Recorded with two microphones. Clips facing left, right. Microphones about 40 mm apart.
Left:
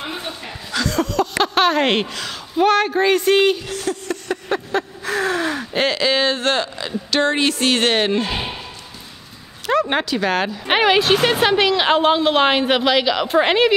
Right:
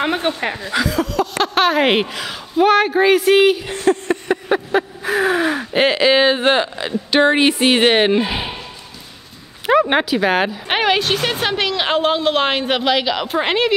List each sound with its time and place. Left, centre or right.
0.0 s speech: right
0.8 s a sound: centre
1.4 s speech: centre
3.6 s speech: right
4.3 s speech: centre
9.7 s speech: centre
10.7 s a woman's voice: centre